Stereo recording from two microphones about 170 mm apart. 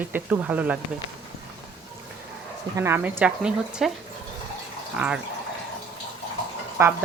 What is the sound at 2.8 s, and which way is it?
Speech, 15° right (ahead or behind).